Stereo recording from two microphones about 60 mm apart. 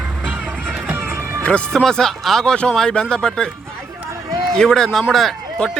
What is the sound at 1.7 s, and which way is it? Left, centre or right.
A man's voice, centre.